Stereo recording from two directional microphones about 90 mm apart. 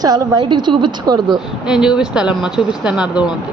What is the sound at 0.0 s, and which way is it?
A woman's voice, 50° right (ahead or behind).